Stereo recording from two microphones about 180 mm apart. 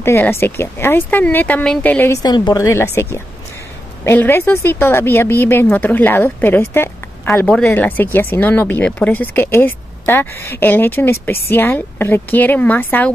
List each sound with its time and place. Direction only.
0.0 s speech: 15° left (ahead or behind)
2.2 s speech: 25° left (ahead or behind)